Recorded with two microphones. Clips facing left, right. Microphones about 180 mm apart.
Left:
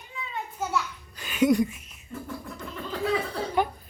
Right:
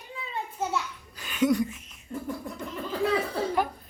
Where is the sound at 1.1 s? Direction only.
5° left (ahead or behind).